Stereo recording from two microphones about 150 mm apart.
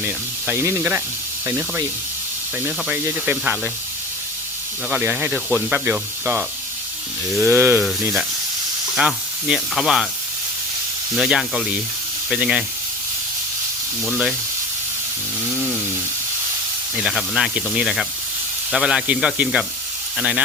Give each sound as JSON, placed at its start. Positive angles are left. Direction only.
{"t": 0.0, "sound": "speech", "side_deg": -15}
{"t": 4.9, "sound": "speech", "side_deg": -10}
{"t": 7.4, "sound": "speech", "side_deg": -15}
{"t": 9.0, "sound": "speech", "side_deg": -5}
{"t": 11.2, "sound": "speech", "side_deg": -5}
{"t": 14.0, "sound": "speech", "side_deg": 0}
{"t": 16.9, "sound": "speech", "side_deg": -5}